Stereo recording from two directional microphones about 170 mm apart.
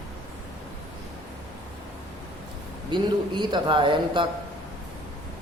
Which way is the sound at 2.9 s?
25° right (ahead or behind).